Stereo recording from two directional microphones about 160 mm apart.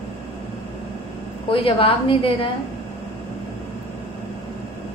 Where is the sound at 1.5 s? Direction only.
35° left (ahead or behind).